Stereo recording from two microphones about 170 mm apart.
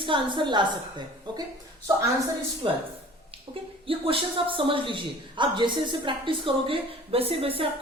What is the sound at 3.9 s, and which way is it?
A woman's voice, 30° right (ahead or behind).